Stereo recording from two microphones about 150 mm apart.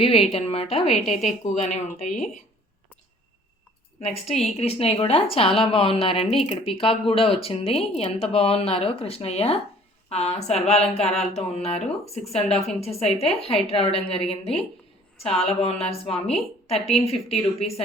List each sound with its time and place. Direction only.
0.0 s a woman's voice: 40° left (ahead or behind)
4.0 s a woman's voice: 45° left (ahead or behind)
15.2 s a woman's voice: 40° left (ahead or behind)